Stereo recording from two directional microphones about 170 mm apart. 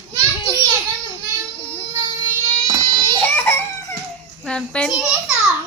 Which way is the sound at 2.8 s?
25° right (ahead or behind).